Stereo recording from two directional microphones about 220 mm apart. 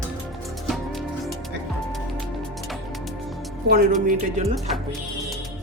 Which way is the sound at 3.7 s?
40° right (ahead or behind).